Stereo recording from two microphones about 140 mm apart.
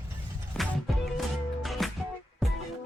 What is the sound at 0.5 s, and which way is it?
Music, centre (ahead or behind).